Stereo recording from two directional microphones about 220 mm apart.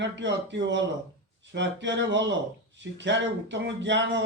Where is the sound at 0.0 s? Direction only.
55° right (ahead or behind).